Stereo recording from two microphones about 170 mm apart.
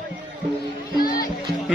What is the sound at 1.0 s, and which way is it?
Music, 55° left (ahead or behind).